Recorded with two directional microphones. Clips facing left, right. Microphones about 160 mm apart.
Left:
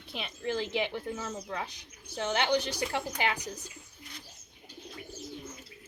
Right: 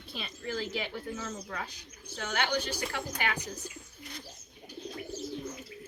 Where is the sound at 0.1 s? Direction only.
20° left (ahead or behind).